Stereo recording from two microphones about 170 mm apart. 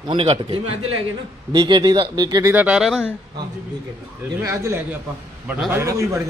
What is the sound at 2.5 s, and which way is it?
Speech, 5° right (ahead or behind).